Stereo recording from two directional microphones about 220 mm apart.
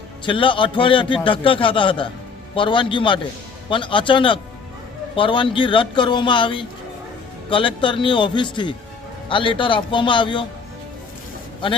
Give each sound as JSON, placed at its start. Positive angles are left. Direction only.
{"t": 0.3, "sound": "a man's voice", "side_deg": 25}